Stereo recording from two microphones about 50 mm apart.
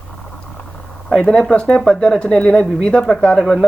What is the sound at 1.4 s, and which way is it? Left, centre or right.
A man's voice, centre.